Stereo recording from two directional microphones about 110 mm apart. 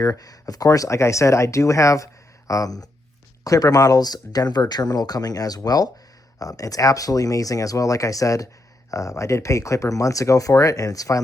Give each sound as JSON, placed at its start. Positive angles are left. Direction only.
{"t": 0.0, "sound": "speech", "side_deg": 35}